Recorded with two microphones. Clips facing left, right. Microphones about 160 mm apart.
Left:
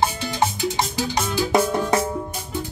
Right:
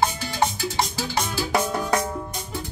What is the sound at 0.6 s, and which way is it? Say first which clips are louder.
Music: left 3 dB; 15° left (ahead or behind).